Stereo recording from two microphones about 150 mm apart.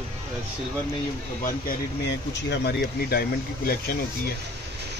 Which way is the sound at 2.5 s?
90° left.